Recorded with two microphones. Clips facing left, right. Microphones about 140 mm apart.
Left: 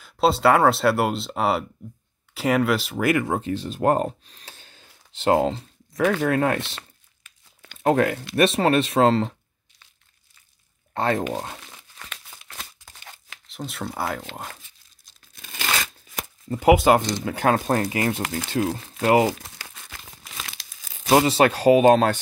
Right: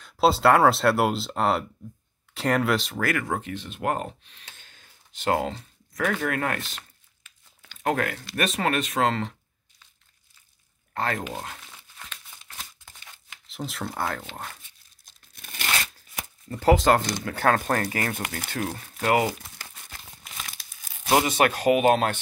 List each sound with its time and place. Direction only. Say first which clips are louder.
0.0 s speech: left 1 dB; centre (ahead or behind)
3.0 s speech: left 5 dB; 20° left (ahead or behind)
7.8 s speech: left 6 dB; 25° left (ahead or behind)
10.9 s speech: left 6 dB; 25° left (ahead or behind)
12.1 s crumpling: left 3 dB; 75° left (ahead or behind)
13.5 s speech: left 1 dB; centre (ahead or behind)
16.4 s speech: left 3 dB; 15° left (ahead or behind)
19.3 s crumpling: left 2 dB; 90° left
21.1 s speech: left 4 dB; 30° left (ahead or behind)